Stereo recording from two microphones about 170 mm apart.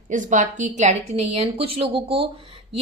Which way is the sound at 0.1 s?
50° right (ahead or behind).